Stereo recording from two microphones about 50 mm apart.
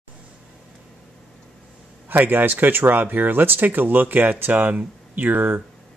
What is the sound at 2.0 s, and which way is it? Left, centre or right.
Speech, right.